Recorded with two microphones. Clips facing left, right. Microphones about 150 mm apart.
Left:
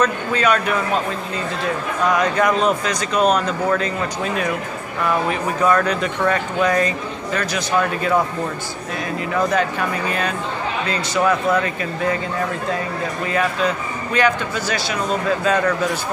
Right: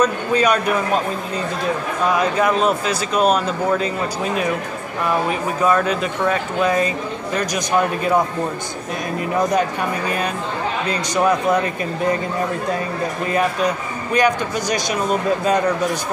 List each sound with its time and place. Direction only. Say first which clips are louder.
0.0 s speech: right 2 dB; 10° right (ahead or behind)
2.3 s speech: even; 5° right (ahead or behind)
5.6 s speech: even; 5° right (ahead or behind)
9.3 s speech: right 1 dB; 15° right (ahead or behind)
10.9 s speech: right 1 dB; 15° right (ahead or behind)
14.1 s speech: right 1 dB; 15° right (ahead or behind)